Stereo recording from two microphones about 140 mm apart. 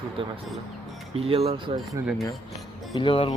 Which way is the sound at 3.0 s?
40° left (ahead or behind).